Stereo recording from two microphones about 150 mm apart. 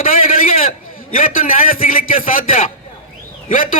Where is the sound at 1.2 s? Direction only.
65° left (ahead or behind).